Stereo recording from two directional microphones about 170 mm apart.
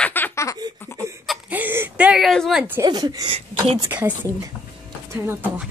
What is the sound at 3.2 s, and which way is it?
Speech, 35° right (ahead or behind).